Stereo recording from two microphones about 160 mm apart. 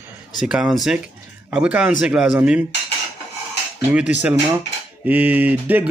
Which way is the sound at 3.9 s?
10° right (ahead or behind).